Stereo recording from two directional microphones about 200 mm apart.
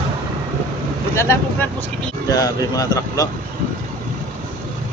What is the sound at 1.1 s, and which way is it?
Speech, 15° left (ahead or behind).